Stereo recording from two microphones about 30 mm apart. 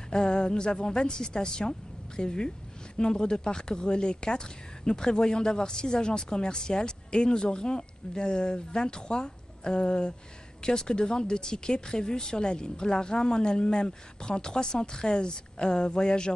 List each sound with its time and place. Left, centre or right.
0.1 s speech: left